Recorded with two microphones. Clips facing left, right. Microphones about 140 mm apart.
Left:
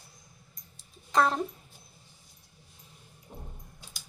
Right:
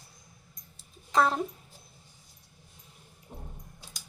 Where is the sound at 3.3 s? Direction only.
5° right (ahead or behind).